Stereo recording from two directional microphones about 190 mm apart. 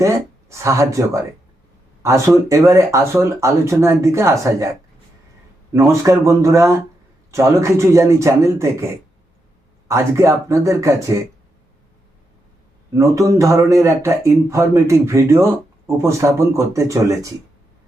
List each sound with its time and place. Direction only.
0.0 s speech: 15° right (ahead or behind)
13.0 s speech: 15° right (ahead or behind)